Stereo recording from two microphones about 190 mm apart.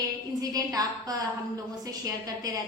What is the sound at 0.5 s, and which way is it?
A woman's voice, 20° right (ahead or behind).